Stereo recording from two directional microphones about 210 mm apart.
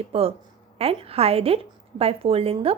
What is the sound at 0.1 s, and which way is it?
A woman's voice, 30° right (ahead or behind).